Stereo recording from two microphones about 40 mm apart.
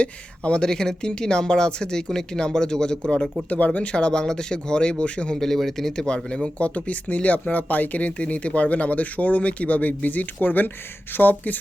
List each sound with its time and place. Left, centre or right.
0.0 s speech: left
0.6 s speech: centre
3.5 s speech: left
3.8 s speech: left
5.4 s speech: centre
6.1 s speech: left